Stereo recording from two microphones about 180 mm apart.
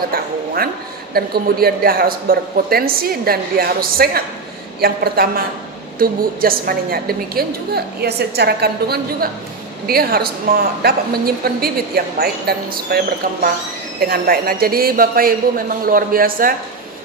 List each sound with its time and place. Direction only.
1.1 s a woman's voice: 60° right (ahead or behind)